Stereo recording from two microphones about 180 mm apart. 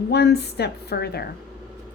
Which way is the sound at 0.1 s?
65° left (ahead or behind).